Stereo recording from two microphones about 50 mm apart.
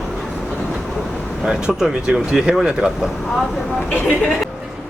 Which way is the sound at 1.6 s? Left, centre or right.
Centre.